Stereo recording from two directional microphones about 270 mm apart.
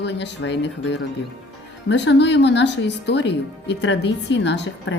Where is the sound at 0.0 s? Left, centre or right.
Left.